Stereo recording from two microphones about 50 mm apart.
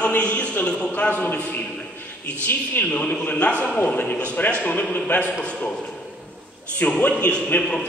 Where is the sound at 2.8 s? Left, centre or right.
Left.